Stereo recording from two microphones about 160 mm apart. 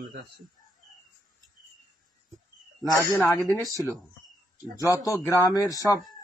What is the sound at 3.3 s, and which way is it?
Speech, 15° left (ahead or behind).